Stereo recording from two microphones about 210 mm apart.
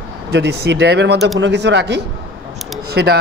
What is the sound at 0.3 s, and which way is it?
A man's voice, 55° right (ahead or behind).